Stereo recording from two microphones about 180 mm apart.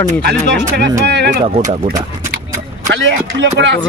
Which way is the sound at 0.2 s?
60° right (ahead or behind).